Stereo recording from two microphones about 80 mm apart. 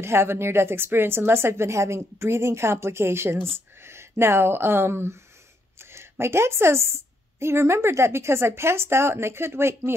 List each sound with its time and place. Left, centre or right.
0.0 s a woman's voice: right